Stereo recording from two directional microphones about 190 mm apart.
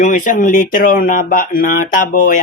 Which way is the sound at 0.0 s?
45° left (ahead or behind).